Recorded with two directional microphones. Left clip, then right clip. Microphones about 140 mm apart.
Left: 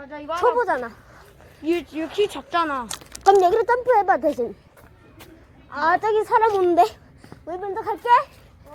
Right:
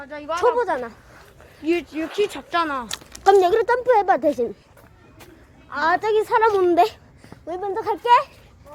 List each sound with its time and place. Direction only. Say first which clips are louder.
0.0 s a woman's voice: right 1 dB; centre (ahead or behind)
1.6 s speech: right 1 dB; 15° right (ahead or behind); by 2.9 s centre (ahead or behind)
3.2 s a woman's voice: even; 20° right (ahead or behind)
5.7 s speech: even; 15° right (ahead or behind)
7.6 s speech: right 3 dB; 35° right (ahead or behind)
7.9 s a woman's voice: right 1 dB; 25° right (ahead or behind)